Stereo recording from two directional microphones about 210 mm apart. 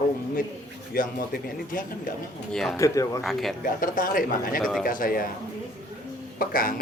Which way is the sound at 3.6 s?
40° left (ahead or behind).